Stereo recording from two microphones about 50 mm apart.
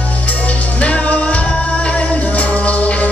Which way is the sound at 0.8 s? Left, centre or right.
Left.